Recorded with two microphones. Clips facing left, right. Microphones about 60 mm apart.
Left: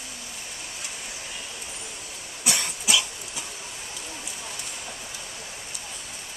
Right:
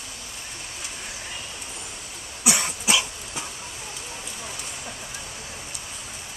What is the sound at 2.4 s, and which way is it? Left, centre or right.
Dog, centre.